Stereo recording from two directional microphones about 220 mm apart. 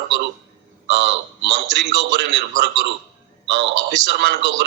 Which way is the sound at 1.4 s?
50° right (ahead or behind).